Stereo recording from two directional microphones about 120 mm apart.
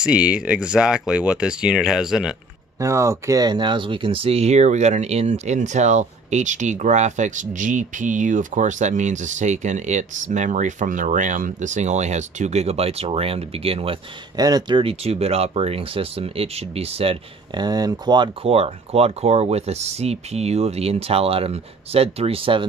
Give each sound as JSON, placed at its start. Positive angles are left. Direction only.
{"t": 0.0, "sound": "speech", "side_deg": -10}
{"t": 2.8, "sound": "speech", "side_deg": -25}
{"t": 14.3, "sound": "speech", "side_deg": -35}
{"t": 14.8, "sound": "speech", "side_deg": -55}
{"t": 17.6, "sound": "speech", "side_deg": -35}
{"t": 18.4, "sound": "speech", "side_deg": -55}